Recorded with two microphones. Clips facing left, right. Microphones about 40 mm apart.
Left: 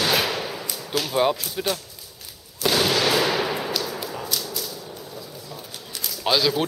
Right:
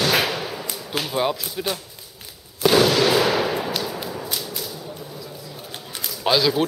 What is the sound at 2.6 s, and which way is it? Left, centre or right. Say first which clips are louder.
Fireworks: right 4 dB; centre.